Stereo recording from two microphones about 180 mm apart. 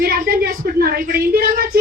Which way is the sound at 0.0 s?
55° right (ahead or behind).